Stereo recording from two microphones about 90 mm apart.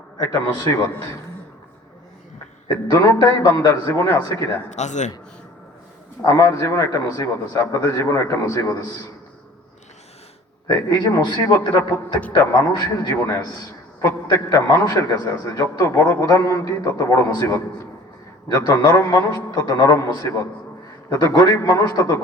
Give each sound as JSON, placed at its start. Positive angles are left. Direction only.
{"t": 0.2, "sound": "a man's voice", "side_deg": 35}
{"t": 2.6, "sound": "a man's voice", "side_deg": 35}
{"t": 6.2, "sound": "a man's voice", "side_deg": 35}
{"t": 10.8, "sound": "a man's voice", "side_deg": 50}
{"t": 14.3, "sound": "a man's voice", "side_deg": 35}